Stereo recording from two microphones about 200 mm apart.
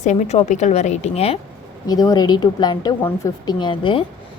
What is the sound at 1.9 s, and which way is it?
A woman's voice, 20° left (ahead or behind).